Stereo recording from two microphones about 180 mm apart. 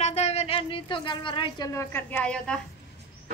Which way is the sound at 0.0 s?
40° left (ahead or behind).